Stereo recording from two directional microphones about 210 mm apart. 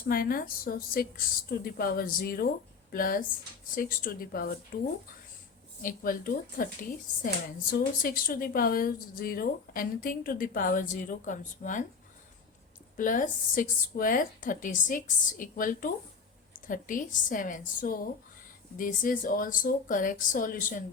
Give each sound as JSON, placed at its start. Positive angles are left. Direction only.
{"t": 0.1, "sound": "speech", "side_deg": 45}
{"t": 5.8, "sound": "a woman's voice", "side_deg": 40}
{"t": 7.7, "sound": "a woman's voice", "side_deg": 40}
{"t": 13.0, "sound": "a woman's voice", "side_deg": 40}